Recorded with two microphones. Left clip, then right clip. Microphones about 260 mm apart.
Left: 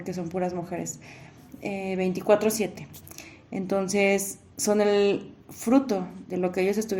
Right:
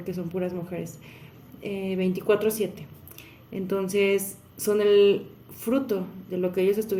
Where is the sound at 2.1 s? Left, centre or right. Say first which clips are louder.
Left 2 dB; centre.